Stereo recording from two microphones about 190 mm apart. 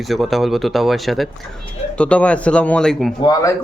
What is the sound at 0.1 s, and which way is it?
Speech, centre (ahead or behind).